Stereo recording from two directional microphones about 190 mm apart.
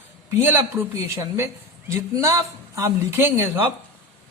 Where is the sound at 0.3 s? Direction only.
10° right (ahead or behind).